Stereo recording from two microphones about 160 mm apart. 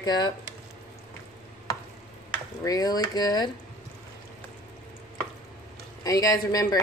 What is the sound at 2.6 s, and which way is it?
Speech, 20° left (ahead or behind).